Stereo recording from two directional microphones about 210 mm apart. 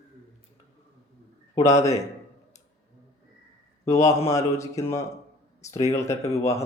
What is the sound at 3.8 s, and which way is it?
A man's voice, 15° left (ahead or behind).